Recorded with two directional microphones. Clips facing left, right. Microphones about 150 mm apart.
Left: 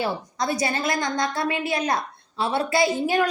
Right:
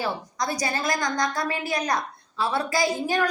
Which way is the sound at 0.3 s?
25° left (ahead or behind).